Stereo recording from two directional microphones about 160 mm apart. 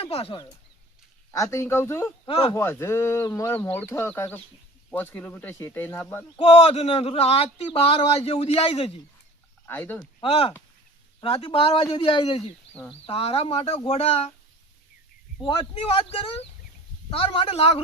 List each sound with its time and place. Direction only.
0.0 s a man's voice: 35° left (ahead or behind)
1.3 s speech: 20° left (ahead or behind)
2.2 s speech: 35° left (ahead or behind)
2.5 s speech: 15° left (ahead or behind)
6.3 s a man's voice: 40° left (ahead or behind)
9.6 s speech: 15° left (ahead or behind)
10.2 s a man's voice: 35° left (ahead or behind)
15.4 s a man's voice: 35° left (ahead or behind)